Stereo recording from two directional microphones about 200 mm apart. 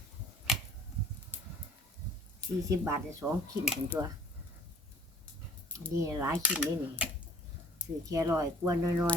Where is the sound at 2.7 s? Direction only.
15° right (ahead or behind).